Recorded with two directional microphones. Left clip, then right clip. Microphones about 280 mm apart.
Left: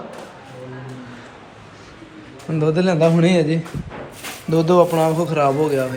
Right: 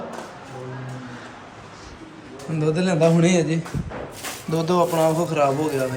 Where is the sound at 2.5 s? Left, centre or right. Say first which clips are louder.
Left 4 dB; centre.